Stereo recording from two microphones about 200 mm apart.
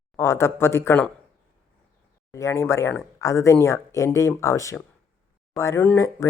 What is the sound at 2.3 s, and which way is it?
Speech, 15° left (ahead or behind).